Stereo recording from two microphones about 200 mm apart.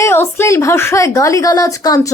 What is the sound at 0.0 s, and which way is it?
A woman's voice, 10° left (ahead or behind).